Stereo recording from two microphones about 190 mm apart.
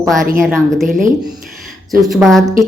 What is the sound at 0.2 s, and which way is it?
Speech, 45° right (ahead or behind).